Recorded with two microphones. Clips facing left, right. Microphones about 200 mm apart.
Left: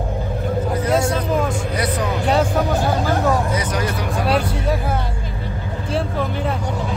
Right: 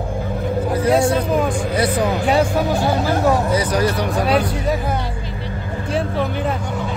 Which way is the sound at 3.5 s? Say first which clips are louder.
Right 4 dB; 35° right (ahead or behind).